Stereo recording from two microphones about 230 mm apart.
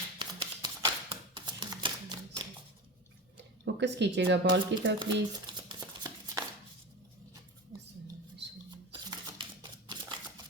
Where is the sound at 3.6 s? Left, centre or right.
Right.